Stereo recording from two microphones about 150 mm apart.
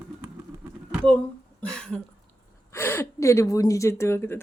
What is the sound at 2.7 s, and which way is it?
A woman's voice, 15° left (ahead or behind).